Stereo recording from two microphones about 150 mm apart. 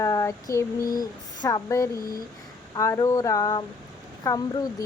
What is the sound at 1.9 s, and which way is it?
Speech, 75° left (ahead or behind).